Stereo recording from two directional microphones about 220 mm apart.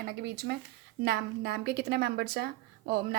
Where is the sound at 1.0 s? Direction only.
50° right (ahead or behind).